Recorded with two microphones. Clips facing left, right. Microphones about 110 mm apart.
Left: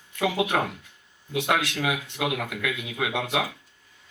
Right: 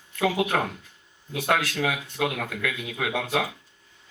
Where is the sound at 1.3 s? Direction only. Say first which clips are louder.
Even; 20° left (ahead or behind).